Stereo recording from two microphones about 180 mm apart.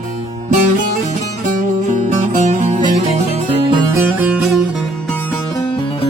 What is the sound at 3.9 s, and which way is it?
Music, 10° right (ahead or behind).